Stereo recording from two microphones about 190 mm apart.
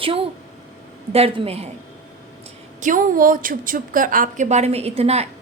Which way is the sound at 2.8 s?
45° right (ahead or behind).